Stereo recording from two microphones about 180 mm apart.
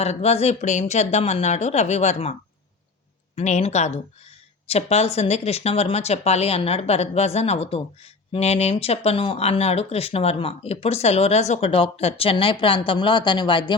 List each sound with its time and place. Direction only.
0.0 s speech: 35° left (ahead or behind)
3.3 s speech: 40° left (ahead or behind)